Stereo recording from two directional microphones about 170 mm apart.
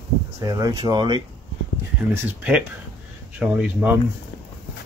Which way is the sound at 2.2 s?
10° right (ahead or behind).